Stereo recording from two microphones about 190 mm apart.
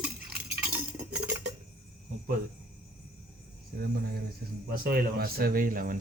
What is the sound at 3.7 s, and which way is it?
Speech, 55° right (ahead or behind).